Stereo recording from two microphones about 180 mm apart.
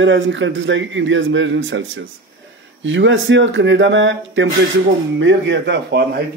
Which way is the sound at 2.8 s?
90° right.